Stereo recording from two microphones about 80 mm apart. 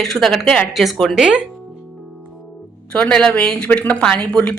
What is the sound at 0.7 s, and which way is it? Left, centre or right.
Speech, centre.